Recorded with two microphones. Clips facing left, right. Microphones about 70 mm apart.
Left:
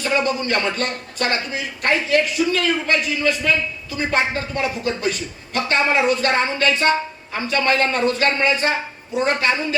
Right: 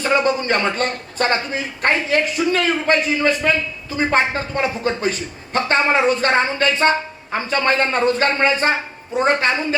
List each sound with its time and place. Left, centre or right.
0.0 s a man's voice: right